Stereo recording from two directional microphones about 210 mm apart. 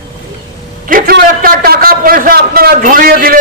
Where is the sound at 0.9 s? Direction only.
45° right (ahead or behind).